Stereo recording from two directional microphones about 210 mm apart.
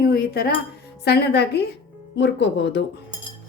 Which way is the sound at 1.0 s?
50° left (ahead or behind).